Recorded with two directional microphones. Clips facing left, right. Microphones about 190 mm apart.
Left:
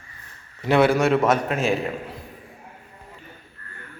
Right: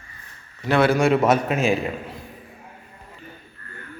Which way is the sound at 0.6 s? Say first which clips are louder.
Left 1 dB; 20° left (ahead or behind).